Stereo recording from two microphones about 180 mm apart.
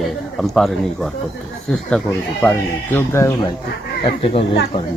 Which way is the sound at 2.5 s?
15° left (ahead or behind).